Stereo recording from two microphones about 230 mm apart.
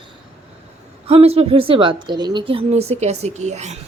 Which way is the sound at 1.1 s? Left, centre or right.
Right.